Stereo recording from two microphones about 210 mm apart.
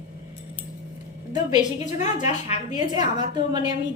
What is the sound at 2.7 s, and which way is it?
Speech, 20° right (ahead or behind).